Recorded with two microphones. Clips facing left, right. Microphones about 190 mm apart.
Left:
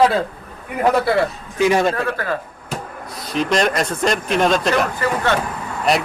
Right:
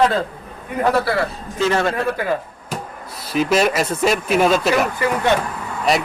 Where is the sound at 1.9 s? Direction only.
15° right (ahead or behind).